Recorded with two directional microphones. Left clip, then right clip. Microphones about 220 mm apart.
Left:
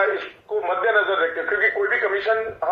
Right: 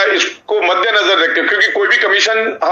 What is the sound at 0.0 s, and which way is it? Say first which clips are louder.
Radio: right 9 dB; 45° right (ahead or behind).